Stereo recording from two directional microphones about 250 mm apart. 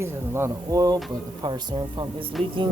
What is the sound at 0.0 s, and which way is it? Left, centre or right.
Speech, centre.